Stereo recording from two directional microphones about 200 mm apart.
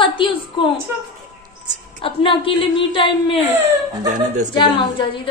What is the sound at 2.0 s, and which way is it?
A woman's voice, 25° left (ahead or behind).